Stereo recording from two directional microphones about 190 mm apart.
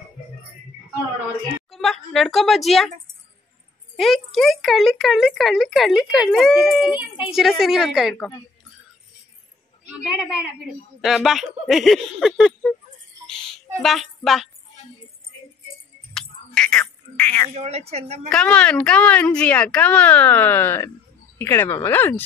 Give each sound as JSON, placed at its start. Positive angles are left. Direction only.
{"t": 1.7, "sound": "a woman's voice", "side_deg": 0}
{"t": 3.9, "sound": "speech", "side_deg": 0}
{"t": 6.9, "sound": "a woman's voice", "side_deg": 25}
{"t": 7.3, "sound": "speech", "side_deg": 0}
{"t": 10.0, "sound": "speech", "side_deg": -5}
{"t": 13.8, "sound": "speech", "side_deg": 0}
{"t": 16.1, "sound": "cat", "side_deg": 5}
{"t": 17.6, "sound": "a woman's voice", "side_deg": -35}
{"t": 18.3, "sound": "speech", "side_deg": 5}